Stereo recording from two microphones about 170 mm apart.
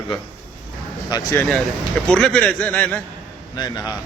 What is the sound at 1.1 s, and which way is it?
Speech, 20° left (ahead or behind).